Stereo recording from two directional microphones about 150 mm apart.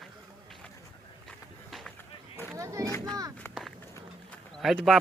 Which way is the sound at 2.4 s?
20° right (ahead or behind).